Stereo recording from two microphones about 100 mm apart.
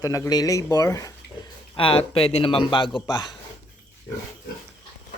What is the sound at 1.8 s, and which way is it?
A man's voice, 65° left (ahead or behind).